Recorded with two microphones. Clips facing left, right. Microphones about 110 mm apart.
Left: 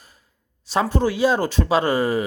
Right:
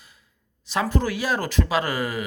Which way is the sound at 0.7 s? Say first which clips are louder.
Left 4 dB; 30° left (ahead or behind).